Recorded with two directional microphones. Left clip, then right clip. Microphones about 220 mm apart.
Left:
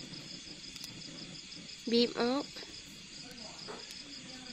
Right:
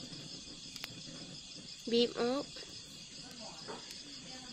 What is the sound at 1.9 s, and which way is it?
Speech, 20° left (ahead or behind).